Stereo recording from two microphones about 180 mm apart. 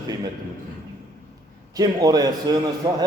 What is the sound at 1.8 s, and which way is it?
Speech, 20° right (ahead or behind).